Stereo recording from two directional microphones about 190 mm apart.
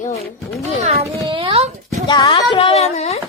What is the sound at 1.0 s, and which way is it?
Speech, 25° right (ahead or behind).